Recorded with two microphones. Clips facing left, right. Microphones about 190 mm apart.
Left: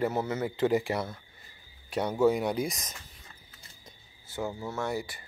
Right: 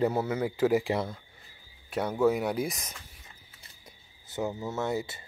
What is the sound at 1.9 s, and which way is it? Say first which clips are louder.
Speech: left 1 dB; centre (ahead or behind).